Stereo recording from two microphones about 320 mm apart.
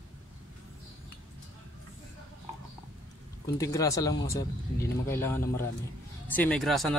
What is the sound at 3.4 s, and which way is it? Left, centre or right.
Speech, centre.